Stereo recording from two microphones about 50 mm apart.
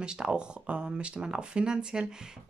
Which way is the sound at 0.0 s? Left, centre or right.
Centre.